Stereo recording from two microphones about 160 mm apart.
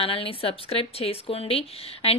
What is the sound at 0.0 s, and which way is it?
Speech, 35° left (ahead or behind).